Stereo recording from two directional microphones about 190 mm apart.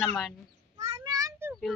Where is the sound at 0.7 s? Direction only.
35° right (ahead or behind).